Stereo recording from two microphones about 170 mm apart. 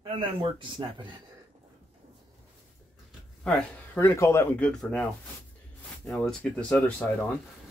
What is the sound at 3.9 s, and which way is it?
Speech, 15° left (ahead or behind).